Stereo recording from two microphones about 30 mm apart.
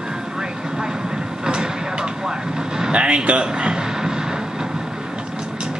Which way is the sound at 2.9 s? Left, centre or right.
Right.